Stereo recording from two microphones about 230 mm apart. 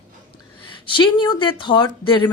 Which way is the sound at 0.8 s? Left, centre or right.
Left.